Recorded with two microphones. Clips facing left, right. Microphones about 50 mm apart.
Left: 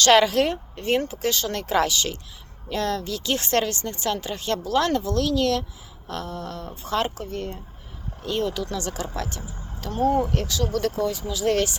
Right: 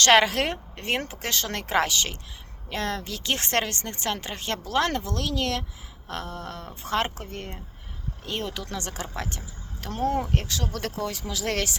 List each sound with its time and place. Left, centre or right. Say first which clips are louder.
0.0 s speech: left 2 dB; right
11.0 s speech: left 6 dB; right